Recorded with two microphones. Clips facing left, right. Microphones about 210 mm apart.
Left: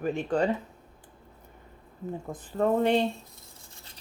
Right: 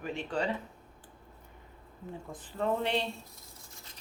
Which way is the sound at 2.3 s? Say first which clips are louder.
Left 6 dB; 45° left (ahead or behind).